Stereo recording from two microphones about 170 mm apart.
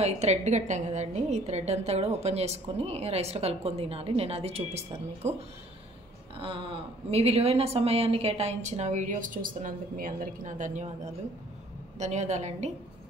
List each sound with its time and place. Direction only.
0.0 s a woman's voice: 40° right (ahead or behind)
6.3 s a woman's voice: 30° right (ahead or behind)